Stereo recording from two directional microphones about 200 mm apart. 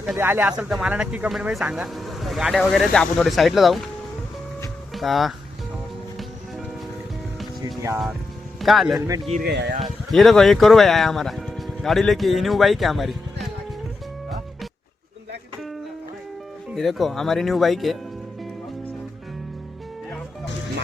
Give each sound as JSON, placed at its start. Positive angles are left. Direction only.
{"t": 0.0, "sound": "speech", "side_deg": -5}
{"t": 4.9, "sound": "speech", "side_deg": 0}
{"t": 7.6, "sound": "music", "side_deg": -15}
{"t": 8.6, "sound": "speech", "side_deg": 0}
{"t": 9.0, "sound": "speech", "side_deg": -15}
{"t": 9.4, "sound": "speech", "side_deg": -55}
{"t": 9.8, "sound": "speech", "side_deg": 0}
{"t": 16.7, "sound": "speech", "side_deg": 0}